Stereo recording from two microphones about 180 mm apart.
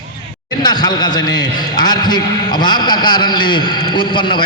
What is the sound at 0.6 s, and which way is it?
A man's voice, 25° left (ahead or behind).